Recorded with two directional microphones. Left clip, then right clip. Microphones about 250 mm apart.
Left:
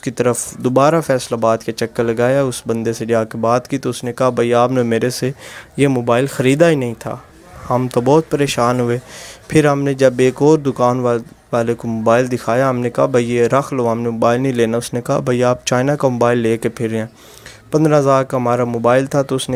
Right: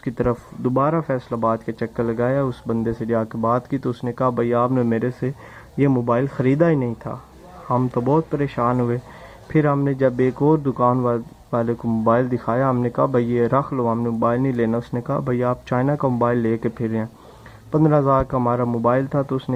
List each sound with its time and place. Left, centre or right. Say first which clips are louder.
0.0 s speech: left 6 dB; left
2.7 s speech: left 5 dB; left
4.4 s speech: left 7 dB; left
10.8 s speech: left 4 dB; left